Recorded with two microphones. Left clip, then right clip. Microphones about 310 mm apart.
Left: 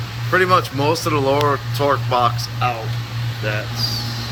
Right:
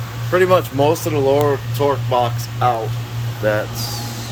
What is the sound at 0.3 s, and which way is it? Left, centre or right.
Speech, centre.